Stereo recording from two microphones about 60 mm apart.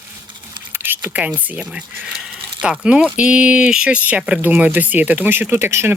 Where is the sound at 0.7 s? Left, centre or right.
Right.